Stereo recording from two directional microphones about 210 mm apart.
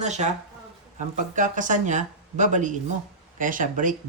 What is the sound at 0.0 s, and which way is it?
Speech, 35° right (ahead or behind).